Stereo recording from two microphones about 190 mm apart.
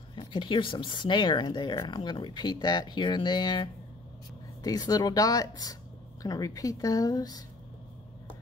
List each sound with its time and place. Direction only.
0.1 s speech: 25° left (ahead or behind)